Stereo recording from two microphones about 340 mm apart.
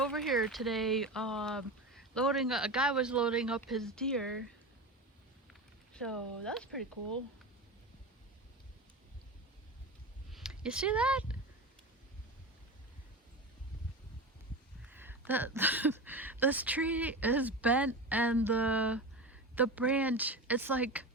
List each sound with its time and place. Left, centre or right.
0.0 s speech: centre
5.9 s speech: centre
10.3 s speech: centre
14.8 s speech: centre